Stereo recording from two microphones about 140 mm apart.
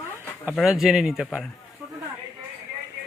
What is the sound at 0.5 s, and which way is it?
Speech, centre (ahead or behind).